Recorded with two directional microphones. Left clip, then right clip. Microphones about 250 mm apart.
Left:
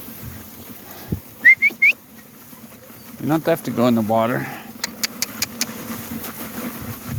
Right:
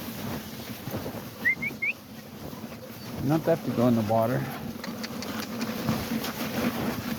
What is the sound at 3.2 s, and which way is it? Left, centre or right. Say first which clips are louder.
Speech: left 6 dB; left.